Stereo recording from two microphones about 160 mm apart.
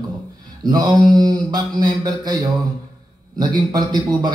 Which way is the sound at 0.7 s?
25° right (ahead or behind).